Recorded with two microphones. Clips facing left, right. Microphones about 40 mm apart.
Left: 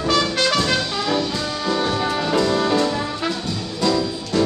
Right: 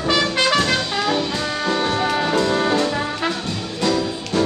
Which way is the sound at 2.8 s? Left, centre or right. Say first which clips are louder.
Right 1 dB; centre.